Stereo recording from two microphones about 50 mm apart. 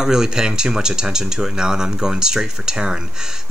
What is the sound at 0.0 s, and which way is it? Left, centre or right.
Speech, centre.